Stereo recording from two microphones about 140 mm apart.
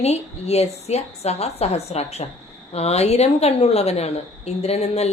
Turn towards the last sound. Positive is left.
turn(degrees=50)  # may be behind; listen again after turning